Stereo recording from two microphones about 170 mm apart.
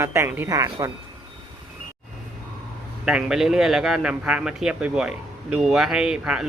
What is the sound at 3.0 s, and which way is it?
A man's voice, 5° right (ahead or behind).